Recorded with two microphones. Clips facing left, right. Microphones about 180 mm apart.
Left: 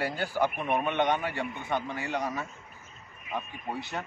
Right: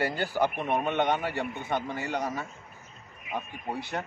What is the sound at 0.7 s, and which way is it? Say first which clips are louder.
A man's voice: even; 15° right (ahead or behind).